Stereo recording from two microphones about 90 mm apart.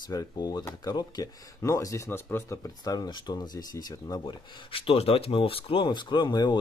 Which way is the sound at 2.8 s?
45° left (ahead or behind).